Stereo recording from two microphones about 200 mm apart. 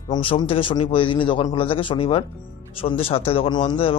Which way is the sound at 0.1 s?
25° left (ahead or behind).